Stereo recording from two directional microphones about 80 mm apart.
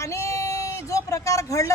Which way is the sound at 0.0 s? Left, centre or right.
Left.